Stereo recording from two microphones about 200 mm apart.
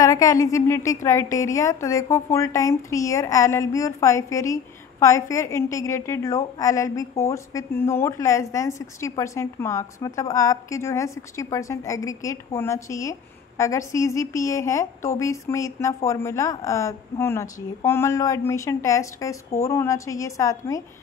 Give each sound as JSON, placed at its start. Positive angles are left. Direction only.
{"t": 0.0, "sound": "a woman's voice", "side_deg": 15}